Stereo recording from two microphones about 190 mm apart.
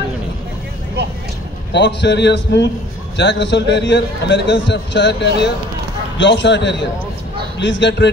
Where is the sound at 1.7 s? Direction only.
65° left (ahead or behind).